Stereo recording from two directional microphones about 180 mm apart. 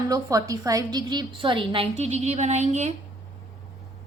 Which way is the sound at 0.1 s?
20° right (ahead or behind).